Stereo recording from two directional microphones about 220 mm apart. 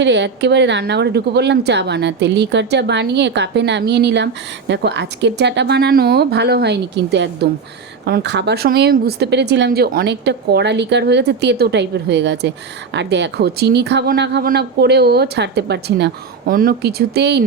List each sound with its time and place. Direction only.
0.0 s speech: 55° right (ahead or behind)